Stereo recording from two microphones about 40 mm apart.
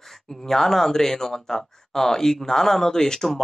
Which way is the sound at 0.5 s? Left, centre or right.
Centre.